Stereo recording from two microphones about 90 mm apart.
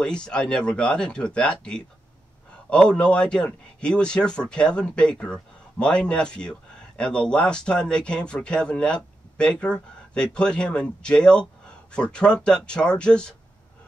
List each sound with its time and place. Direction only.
0.0 s speech: 10° left (ahead or behind)